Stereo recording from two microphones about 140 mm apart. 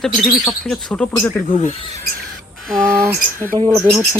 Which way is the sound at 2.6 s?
5° left (ahead or behind).